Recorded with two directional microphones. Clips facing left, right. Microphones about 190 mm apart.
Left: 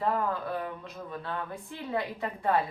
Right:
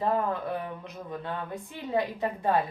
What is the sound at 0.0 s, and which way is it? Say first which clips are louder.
Speech: right 2 dB; 20° right (ahead or behind).